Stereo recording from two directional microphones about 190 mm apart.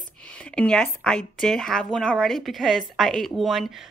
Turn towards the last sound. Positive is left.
turn(degrees=0)  # may be behind; listen again after turning